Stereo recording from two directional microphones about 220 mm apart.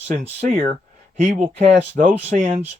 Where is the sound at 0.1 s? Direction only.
30° right (ahead or behind).